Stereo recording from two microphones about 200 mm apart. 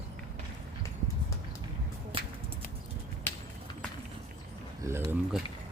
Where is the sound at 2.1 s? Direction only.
25° right (ahead or behind).